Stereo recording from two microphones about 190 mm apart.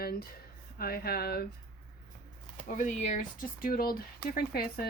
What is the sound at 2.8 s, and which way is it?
Speech, 40° left (ahead or behind).